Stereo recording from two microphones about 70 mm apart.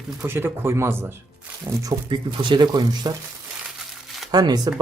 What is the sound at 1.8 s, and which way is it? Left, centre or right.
Speech, right.